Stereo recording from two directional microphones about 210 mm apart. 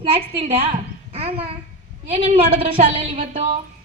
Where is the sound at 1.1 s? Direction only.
25° right (ahead or behind).